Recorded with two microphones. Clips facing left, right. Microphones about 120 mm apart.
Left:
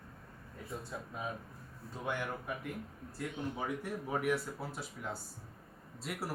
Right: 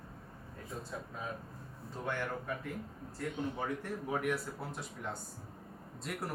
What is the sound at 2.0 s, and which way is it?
Speech, 15° left (ahead or behind).